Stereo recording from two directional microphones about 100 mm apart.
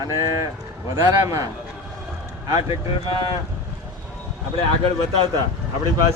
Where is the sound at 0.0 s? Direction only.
35° right (ahead or behind).